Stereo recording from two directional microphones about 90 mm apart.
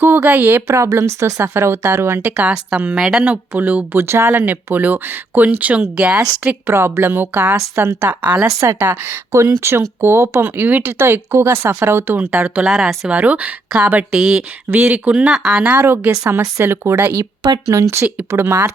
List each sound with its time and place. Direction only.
0.0 s speech: 20° right (ahead or behind)
0.7 s speech: 35° right (ahead or behind); by 3.3 s 5° right (ahead or behind)
3.5 s speech: 20° right (ahead or behind)
6.7 s speech: 30° right (ahead or behind)
8.2 s speech: 15° right (ahead or behind)
12.6 s speech: 5° right (ahead or behind)
13.1 s speech: 15° right (ahead or behind)
14.7 s speech: 20° right (ahead or behind)
15.7 s speech: 25° right (ahead or behind)
17.4 s speech: 45° right (ahead or behind)
18.0 s speech: 20° right (ahead or behind)